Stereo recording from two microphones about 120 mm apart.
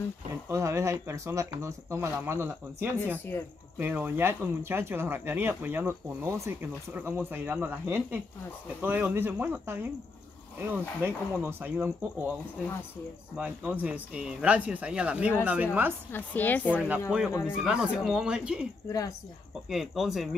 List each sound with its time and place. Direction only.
0.5 s speech: 25° right (ahead or behind)
13.4 s speech: 10° right (ahead or behind)
16.1 s speech: 15° left (ahead or behind)
16.7 s speech: 10° right (ahead or behind)
17.3 s speech: 25° left (ahead or behind)
17.6 s speech: 5° right (ahead or behind)
18.9 s speech: 30° left (ahead or behind)
19.7 s speech: centre (ahead or behind)